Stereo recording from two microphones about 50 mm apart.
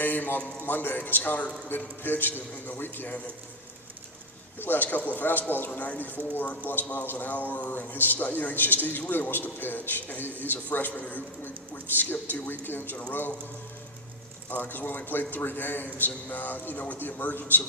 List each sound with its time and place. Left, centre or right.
0.0 s a man's voice: left
4.6 s a man's voice: left
14.5 s a man's voice: left